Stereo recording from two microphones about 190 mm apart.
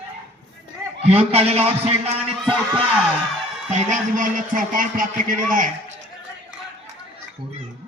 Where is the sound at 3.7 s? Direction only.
40° right (ahead or behind).